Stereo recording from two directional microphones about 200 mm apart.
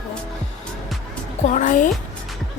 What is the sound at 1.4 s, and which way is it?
Speech, 40° left (ahead or behind).